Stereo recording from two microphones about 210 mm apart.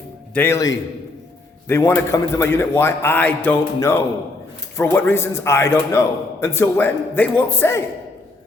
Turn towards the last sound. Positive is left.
turn(degrees=10)  # may be behind; listen again after turning